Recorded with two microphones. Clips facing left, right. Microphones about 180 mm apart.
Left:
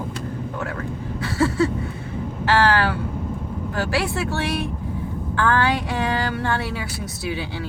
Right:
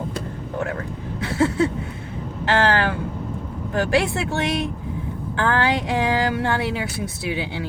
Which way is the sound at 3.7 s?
20° right (ahead or behind).